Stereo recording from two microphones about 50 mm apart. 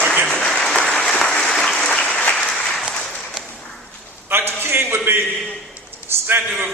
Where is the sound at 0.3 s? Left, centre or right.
Centre.